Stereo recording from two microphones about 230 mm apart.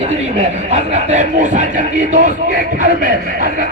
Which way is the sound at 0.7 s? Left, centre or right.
Right.